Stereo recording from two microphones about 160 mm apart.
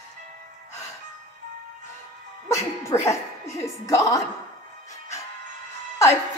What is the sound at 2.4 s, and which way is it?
A woman's voice, 15° left (ahead or behind).